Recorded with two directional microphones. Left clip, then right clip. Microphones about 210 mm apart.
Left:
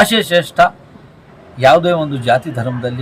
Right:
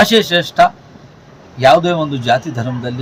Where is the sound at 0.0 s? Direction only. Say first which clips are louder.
Right 1 dB; 5° left (ahead or behind).